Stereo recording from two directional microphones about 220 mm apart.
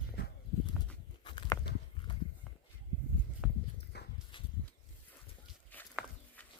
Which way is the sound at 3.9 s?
50° left (ahead or behind).